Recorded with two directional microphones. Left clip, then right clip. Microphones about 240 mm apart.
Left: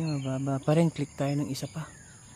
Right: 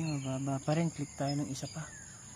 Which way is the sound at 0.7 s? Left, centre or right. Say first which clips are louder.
Left 11 dB; left.